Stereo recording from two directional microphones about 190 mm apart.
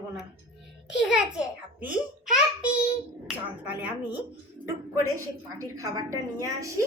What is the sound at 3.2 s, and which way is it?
Speech, 5° right (ahead or behind).